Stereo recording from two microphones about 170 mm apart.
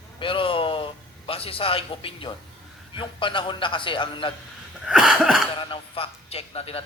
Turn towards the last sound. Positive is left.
turn(degrees=35)  # may be behind; listen again after turning